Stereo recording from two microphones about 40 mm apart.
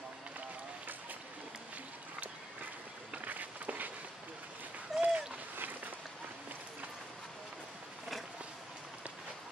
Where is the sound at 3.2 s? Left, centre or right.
Right.